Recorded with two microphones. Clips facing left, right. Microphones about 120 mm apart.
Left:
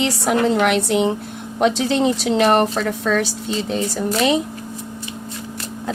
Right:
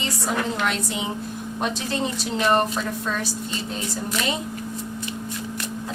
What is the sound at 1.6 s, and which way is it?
A woman's voice, 90° left.